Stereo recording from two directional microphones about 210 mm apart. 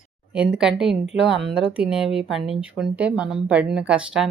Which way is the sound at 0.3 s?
5° right (ahead or behind).